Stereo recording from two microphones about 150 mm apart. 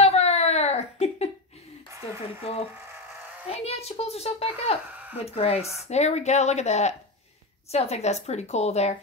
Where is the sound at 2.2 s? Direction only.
45° left (ahead or behind).